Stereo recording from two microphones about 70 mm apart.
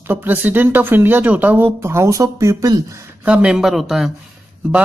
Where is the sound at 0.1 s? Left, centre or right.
Right.